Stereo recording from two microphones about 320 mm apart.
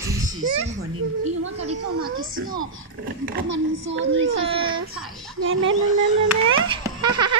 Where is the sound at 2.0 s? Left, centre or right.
Right.